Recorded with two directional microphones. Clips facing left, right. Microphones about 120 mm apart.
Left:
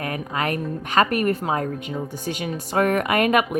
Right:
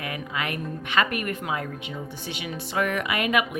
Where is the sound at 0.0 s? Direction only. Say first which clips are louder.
Left 5 dB; 40° left (ahead or behind).